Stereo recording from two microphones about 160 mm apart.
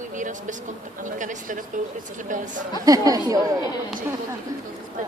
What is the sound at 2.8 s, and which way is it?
Speech, 25° right (ahead or behind).